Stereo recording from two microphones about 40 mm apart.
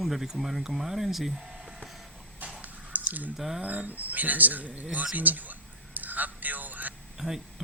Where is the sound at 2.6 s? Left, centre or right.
Right.